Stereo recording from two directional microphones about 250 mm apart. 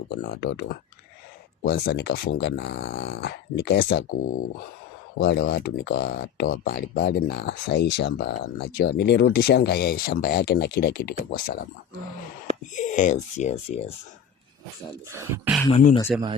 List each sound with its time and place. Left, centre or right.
0.1 s speech: left
5.2 s speech: left
12.7 s speech: left
15.1 s speech: centre